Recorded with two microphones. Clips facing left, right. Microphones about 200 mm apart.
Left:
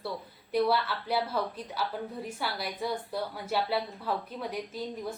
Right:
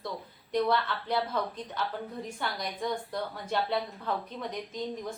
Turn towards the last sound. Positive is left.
turn(degrees=5)  # may be behind; listen again after turning